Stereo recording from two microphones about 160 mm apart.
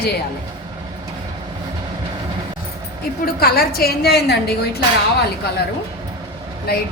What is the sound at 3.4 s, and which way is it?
A woman's voice, 70° left (ahead or behind).